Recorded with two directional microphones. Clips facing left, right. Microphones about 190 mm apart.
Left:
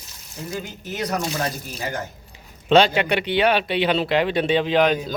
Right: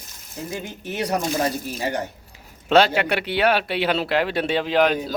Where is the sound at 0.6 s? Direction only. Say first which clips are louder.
Right 1 dB; 30° right (ahead or behind).